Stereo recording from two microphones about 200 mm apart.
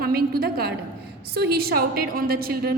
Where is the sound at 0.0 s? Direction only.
50° right (ahead or behind).